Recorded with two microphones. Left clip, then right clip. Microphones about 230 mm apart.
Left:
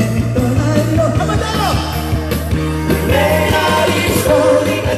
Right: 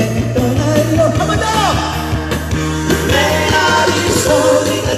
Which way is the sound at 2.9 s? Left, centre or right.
Left.